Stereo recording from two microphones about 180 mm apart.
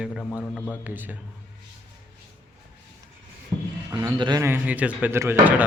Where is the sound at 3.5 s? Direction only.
15° right (ahead or behind).